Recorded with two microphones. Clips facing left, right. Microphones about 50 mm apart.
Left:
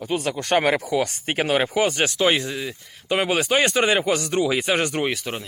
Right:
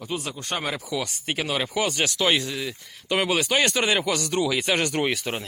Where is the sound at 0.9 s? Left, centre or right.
Left.